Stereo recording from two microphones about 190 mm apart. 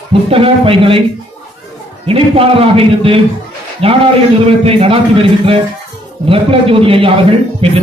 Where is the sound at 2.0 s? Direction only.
30° right (ahead or behind).